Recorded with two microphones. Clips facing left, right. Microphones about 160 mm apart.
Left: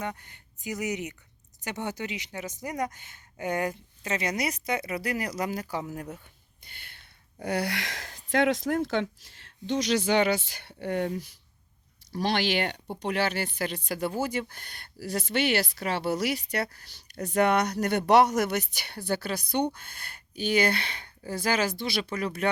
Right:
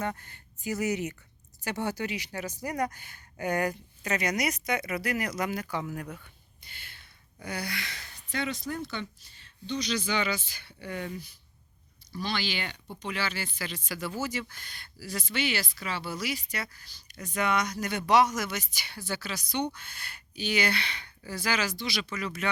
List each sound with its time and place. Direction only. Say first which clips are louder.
0.0 s speech: right 1 dB; 15° left (ahead or behind)
7.4 s speech: left 7 dB; 80° left; by 22.4 s 55° left (ahead or behind)